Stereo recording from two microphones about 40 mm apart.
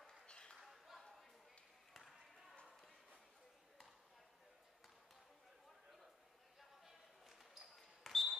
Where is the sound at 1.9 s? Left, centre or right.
Centre.